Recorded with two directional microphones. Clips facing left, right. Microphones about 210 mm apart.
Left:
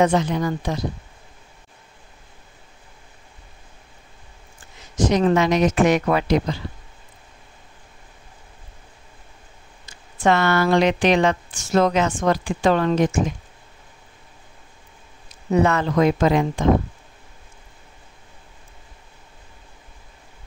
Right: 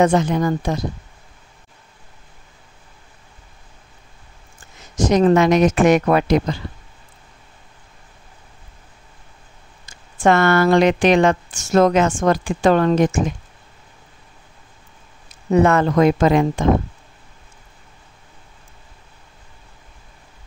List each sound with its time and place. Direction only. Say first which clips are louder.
0.0 s speech: right 3 dB; 45° right (ahead or behind)
4.9 s speech: right 4 dB; 45° right (ahead or behind)
9.8 s speech: right 3 dB; 45° right (ahead or behind)
15.5 s speech: right 4 dB; 50° right (ahead or behind)